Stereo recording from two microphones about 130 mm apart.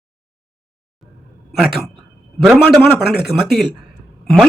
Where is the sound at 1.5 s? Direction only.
5° right (ahead or behind).